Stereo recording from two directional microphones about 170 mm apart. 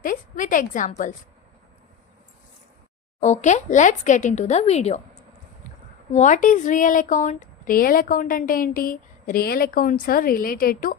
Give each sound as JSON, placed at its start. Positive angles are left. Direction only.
{"t": 0.0, "sound": "speech", "side_deg": 55}
{"t": 3.2, "sound": "speech", "side_deg": 45}